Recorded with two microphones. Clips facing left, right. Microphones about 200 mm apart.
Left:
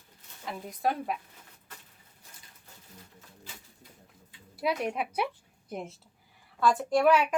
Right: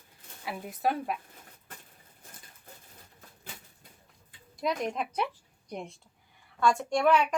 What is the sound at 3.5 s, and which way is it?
Bird, 55° right (ahead or behind).